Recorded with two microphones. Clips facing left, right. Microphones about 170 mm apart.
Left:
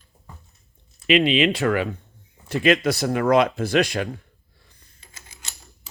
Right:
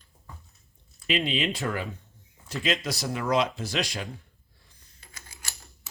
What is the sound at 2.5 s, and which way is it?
Speech, 60° left (ahead or behind).